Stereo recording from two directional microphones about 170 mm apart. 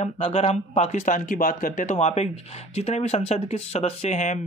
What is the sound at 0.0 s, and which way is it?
A man's voice, 35° left (ahead or behind).